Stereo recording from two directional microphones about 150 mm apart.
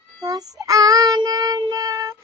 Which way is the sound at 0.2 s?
25° right (ahead or behind).